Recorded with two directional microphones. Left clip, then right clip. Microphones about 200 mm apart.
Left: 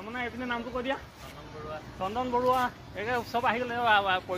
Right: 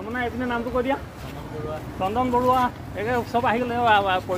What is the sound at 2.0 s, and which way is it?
Speech, 35° left (ahead or behind).